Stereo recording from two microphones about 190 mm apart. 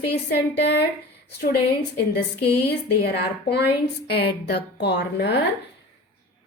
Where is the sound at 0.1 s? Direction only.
65° left (ahead or behind).